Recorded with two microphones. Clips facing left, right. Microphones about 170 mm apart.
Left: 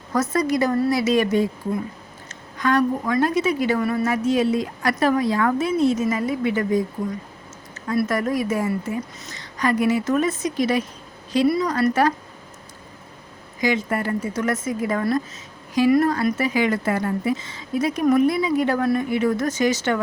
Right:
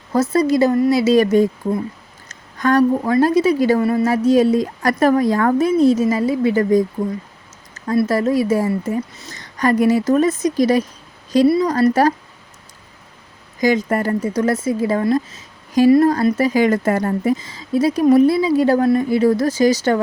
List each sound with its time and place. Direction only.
0.1 s a woman's voice: 30° right (ahead or behind)
7.9 s a woman's voice: 30° right (ahead or behind)
13.6 s a woman's voice: 40° right (ahead or behind)